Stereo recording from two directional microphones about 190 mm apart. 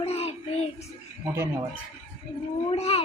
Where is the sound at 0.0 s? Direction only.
35° left (ahead or behind).